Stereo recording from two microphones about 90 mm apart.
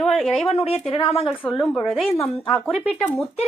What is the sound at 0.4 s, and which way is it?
Speech, 90° left.